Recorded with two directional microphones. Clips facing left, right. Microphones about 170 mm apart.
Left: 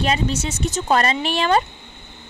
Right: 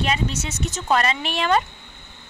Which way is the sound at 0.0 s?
30° left (ahead or behind).